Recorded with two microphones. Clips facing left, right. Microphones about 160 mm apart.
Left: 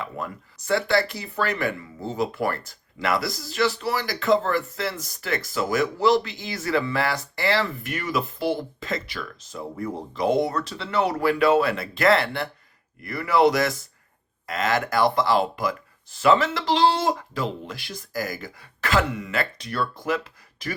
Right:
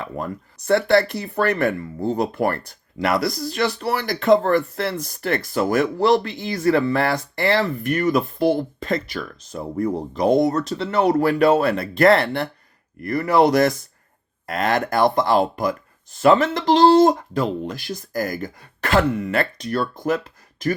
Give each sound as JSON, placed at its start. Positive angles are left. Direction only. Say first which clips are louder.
{"t": 0.0, "sound": "speech", "louder": "right 4 dB", "side_deg": -50}